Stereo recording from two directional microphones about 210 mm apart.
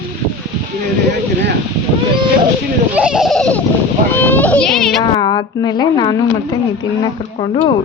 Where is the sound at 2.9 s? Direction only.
5° right (ahead or behind).